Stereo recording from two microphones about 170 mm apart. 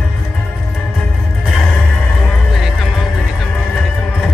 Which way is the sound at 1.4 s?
Centre (ahead or behind).